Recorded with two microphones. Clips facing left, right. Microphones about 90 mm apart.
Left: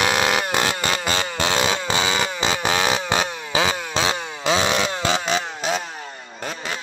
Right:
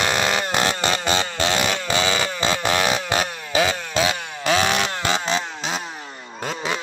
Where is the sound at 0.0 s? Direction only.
10° left (ahead or behind).